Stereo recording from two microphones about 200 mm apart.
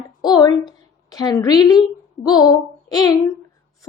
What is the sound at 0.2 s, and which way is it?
A woman's voice, 20° left (ahead or behind).